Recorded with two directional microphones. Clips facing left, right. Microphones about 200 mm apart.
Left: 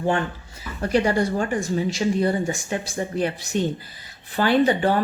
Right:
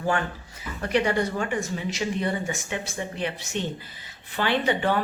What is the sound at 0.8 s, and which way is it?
Speech, 35° left (ahead or behind).